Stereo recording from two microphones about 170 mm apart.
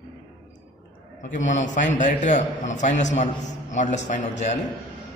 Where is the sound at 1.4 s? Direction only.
45° left (ahead or behind).